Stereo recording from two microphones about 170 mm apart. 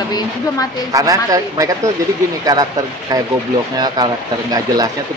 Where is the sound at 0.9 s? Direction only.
20° right (ahead or behind).